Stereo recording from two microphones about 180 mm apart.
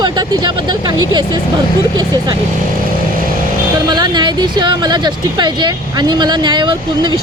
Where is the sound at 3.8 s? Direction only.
25° right (ahead or behind).